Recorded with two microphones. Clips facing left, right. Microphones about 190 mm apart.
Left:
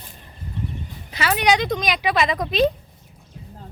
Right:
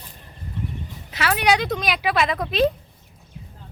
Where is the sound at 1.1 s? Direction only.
Centre (ahead or behind).